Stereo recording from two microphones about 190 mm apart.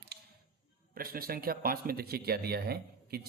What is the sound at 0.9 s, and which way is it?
Speech, 50° right (ahead or behind).